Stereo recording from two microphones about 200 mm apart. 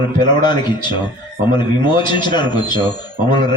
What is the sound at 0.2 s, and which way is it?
A man's voice, 20° left (ahead or behind).